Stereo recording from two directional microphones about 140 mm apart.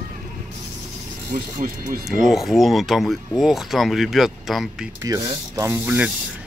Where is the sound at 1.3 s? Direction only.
80° right.